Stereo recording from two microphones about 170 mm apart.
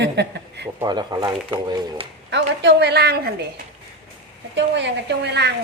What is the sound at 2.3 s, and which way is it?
A woman's voice, 90° right.